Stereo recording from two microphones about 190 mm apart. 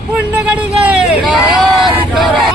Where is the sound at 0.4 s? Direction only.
5° right (ahead or behind).